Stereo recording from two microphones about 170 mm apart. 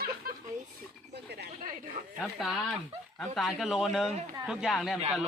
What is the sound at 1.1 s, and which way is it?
Speech, 75° right (ahead or behind).